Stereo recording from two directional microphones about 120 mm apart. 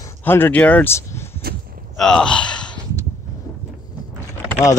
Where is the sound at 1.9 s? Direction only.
5° left (ahead or behind).